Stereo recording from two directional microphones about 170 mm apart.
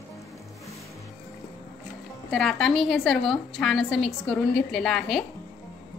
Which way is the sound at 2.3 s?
Centre (ahead or behind).